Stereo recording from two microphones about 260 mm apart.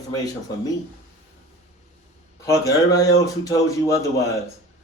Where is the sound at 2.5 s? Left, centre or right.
Centre.